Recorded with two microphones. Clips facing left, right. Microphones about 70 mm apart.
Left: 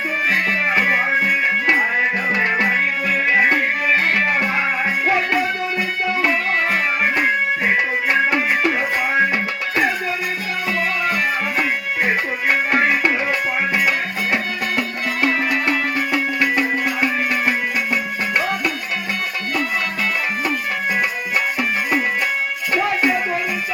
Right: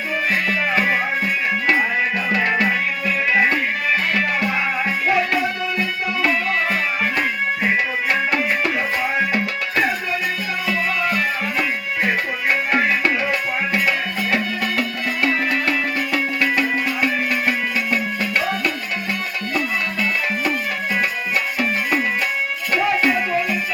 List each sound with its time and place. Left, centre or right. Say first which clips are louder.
0.3 s music: left 2 dB; left
2.3 s music: right 2 dB; left
5.0 s music: right 1 dB; left
6.7 s music: left 2 dB; left
12.0 s music: left 1 dB; left
14.8 s music: left 3 dB; left